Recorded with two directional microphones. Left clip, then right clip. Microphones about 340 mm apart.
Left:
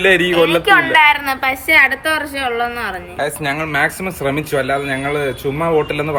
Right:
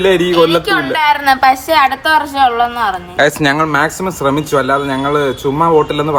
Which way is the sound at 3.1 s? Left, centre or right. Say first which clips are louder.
Right 9 dB; right.